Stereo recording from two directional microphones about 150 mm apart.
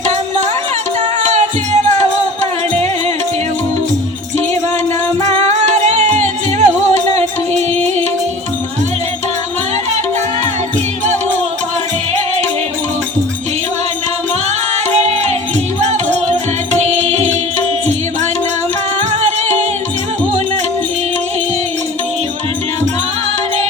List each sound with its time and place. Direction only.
1.2 s music: 50° right (ahead or behind)
5.2 s music: 50° right (ahead or behind)
7.7 s music: 10° left (ahead or behind)
14.8 s music: 45° right (ahead or behind)
19.1 s music: 50° right (ahead or behind)